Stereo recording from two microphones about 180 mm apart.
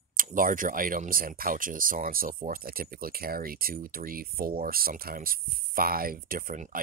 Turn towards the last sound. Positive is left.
turn(degrees=-50)  # may be behind; listen again after turning